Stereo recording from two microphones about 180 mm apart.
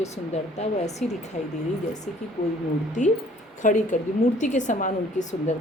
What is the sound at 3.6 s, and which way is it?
A woman's voice, 45° left (ahead or behind).